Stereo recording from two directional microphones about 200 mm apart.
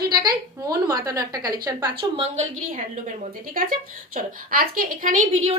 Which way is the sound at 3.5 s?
45° right (ahead or behind).